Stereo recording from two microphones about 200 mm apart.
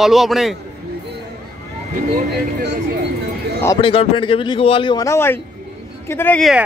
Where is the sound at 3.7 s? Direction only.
25° left (ahead or behind); by 6.6 s centre (ahead or behind).